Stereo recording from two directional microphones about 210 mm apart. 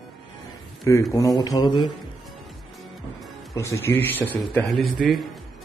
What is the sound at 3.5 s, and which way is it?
A man's voice, 15° left (ahead or behind).